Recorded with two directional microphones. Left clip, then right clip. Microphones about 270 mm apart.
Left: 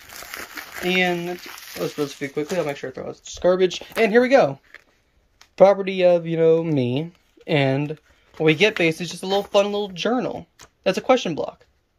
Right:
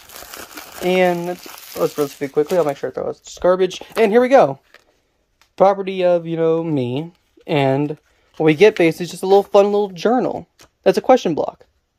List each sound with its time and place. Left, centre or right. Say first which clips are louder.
0.2 s crumpling: left 1 dB; right
0.8 s speech: right 5 dB; centre
1.1 s speech: right 3 dB; right
2.0 s speech: right 7 dB; centre